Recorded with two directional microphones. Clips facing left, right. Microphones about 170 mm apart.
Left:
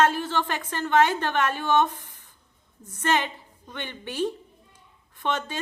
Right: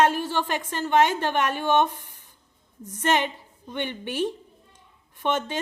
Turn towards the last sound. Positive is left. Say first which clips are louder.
# right 3 dB
turn(degrees=-15)  # may be behind; listen again after turning